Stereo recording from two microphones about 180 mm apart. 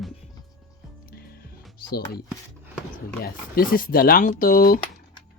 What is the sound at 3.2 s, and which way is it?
Speech, 55° left (ahead or behind).